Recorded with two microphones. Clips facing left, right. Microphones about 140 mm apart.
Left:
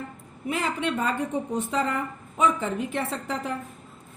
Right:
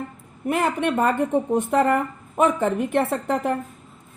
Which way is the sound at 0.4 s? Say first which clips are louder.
Right 6 dB; 55° right (ahead or behind).